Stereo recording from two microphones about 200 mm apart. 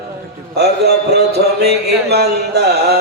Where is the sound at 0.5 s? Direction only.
55° right (ahead or behind).